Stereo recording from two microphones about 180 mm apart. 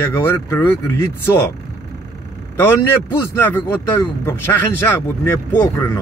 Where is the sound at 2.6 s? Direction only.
10° left (ahead or behind).